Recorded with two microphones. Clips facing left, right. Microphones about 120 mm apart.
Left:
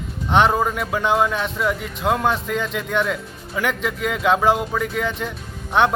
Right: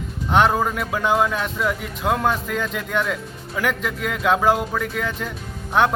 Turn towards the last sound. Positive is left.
turn(degrees=0)  # may be behind; listen again after turning